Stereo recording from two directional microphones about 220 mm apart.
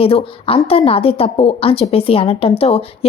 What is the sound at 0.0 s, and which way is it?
A woman's voice, 25° left (ahead or behind).